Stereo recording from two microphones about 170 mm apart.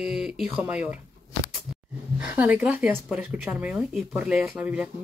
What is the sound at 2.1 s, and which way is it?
Speech, 10° right (ahead or behind).